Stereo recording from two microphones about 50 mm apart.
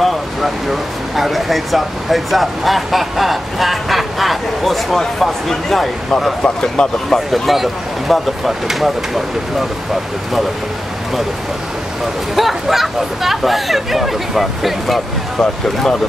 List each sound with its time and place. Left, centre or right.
0.0 s speech: centre
6.4 s speech: centre
7.1 s speech: centre
12.4 s speech: centre
15.3 s speech: centre